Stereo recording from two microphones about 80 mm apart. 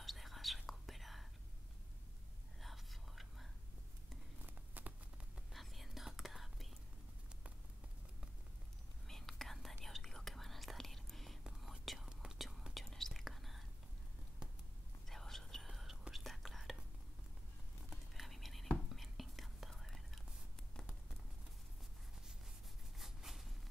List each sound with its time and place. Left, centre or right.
0.0 s whispering: centre
2.6 s whispering: centre
4.8 s a sound: right
5.5 s whispering: centre
9.0 s whispering: centre
15.0 s whispering: centre
17.8 s whispering: centre
20.7 s a sound: centre
22.9 s a sound: centre